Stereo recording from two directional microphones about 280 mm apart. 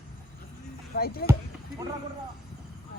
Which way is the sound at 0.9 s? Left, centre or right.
Left.